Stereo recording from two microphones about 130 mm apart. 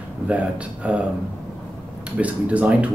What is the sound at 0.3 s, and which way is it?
Speech, 10° right (ahead or behind).